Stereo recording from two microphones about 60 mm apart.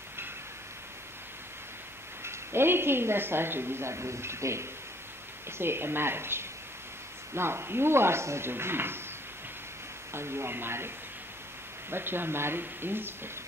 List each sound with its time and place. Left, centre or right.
2.2 s a man's voice: right
10.1 s a man's voice: right
11.9 s speech: right